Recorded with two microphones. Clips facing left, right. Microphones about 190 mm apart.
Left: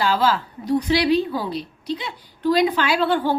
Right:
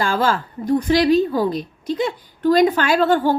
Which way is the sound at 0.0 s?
45° right (ahead or behind).